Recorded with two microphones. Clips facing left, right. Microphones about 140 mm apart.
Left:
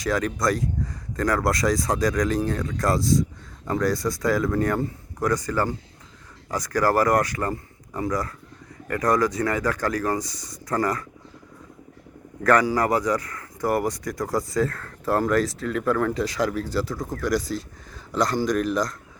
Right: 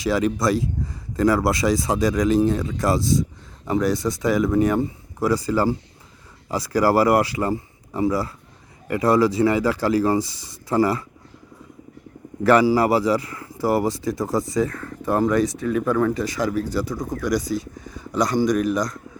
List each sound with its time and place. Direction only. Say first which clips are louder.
0.0 s speech: right 3 dB; 5° right (ahead or behind)
2.2 s speech: right 6 dB; 20° right (ahead or behind)
2.6 s speech: right 2 dB; 5° right (ahead or behind)
2.9 s speech: even; 25° right (ahead or behind)
4.8 s speech: right 3 dB; 5° right (ahead or behind)
10.2 s speech: right 7 dB; 25° right (ahead or behind)
10.8 s speech: right 5 dB; 10° right (ahead or behind)
12.5 s speech: right 4 dB; 5° right (ahead or behind)
13.8 s speech: right 4 dB; 25° right (ahead or behind)
14.8 s speech: right 2 dB; 5° right (ahead or behind)
16.6 s speech: right 1 dB; 15° right (ahead or behind)
16.9 s speech: right 2 dB; centre (ahead or behind)